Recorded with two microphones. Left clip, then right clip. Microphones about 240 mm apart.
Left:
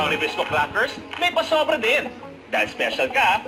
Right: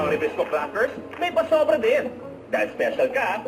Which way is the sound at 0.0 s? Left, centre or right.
Centre.